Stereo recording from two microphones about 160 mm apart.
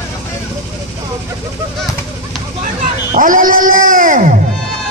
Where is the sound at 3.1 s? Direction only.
55° right (ahead or behind).